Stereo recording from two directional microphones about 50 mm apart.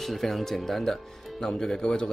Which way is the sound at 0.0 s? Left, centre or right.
Centre.